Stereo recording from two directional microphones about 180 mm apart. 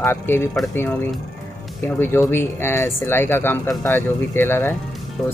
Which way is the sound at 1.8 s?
15° left (ahead or behind).